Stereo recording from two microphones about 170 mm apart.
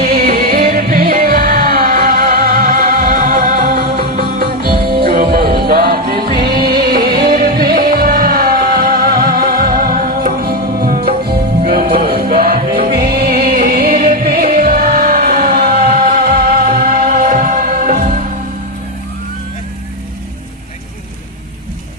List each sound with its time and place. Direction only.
0.0 s music: 65° right (ahead or behind)